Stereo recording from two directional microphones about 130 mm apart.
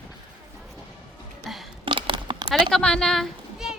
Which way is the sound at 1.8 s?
40° right (ahead or behind).